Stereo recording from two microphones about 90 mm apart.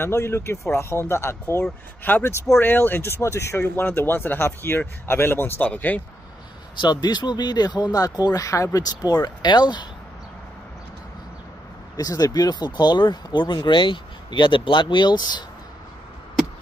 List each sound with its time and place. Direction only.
0.0 s speech: 25° left (ahead or behind)
1.6 s speech: 20° left (ahead or behind)
6.8 s speech: 50° left (ahead or behind)
12.0 s speech: 45° left (ahead or behind)